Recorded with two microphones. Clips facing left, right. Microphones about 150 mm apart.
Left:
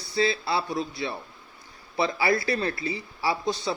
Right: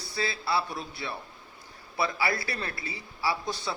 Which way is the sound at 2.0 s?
25° left (ahead or behind).